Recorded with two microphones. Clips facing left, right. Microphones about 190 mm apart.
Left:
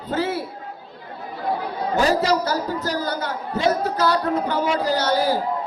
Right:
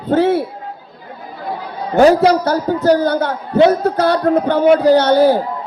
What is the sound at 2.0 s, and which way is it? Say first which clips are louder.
A man's voice: right 10 dB; 60° right (ahead or behind).